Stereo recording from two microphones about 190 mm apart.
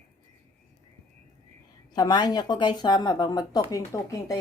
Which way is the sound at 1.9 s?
20° left (ahead or behind).